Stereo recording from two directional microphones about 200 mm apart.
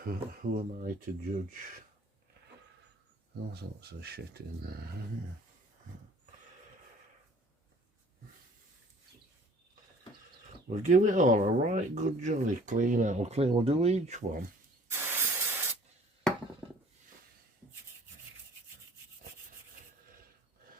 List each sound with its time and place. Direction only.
0.0 s speech: 45° right (ahead or behind)
3.5 s speech: 50° right (ahead or behind)
10.7 s speech: 40° right (ahead or behind)
14.8 s spray: 10° right (ahead or behind)